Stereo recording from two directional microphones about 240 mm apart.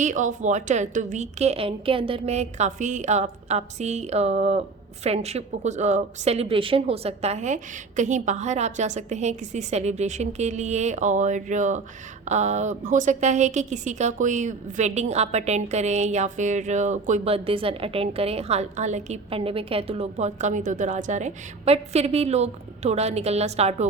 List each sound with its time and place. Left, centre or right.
0.0 s a woman's voice: right